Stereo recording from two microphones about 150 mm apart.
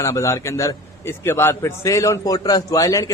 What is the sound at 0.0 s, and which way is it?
A man's voice, 20° left (ahead or behind).